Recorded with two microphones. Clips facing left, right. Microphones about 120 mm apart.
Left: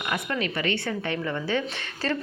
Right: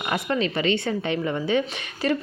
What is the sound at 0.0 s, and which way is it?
Speech, 30° right (ahead or behind).